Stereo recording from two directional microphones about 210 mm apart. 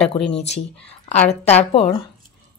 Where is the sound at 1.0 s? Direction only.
30° left (ahead or behind).